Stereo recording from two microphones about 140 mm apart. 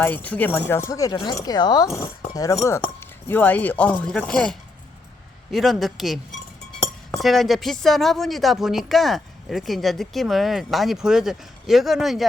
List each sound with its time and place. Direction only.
0.0 s speech: 10° left (ahead or behind)
7.2 s speech: centre (ahead or behind)